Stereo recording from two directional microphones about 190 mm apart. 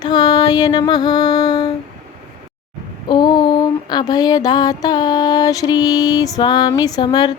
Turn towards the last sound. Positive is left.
turn(degrees=20)  # may be behind; listen again after turning